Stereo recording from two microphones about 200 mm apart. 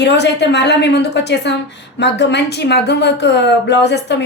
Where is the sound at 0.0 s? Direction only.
60° left (ahead or behind).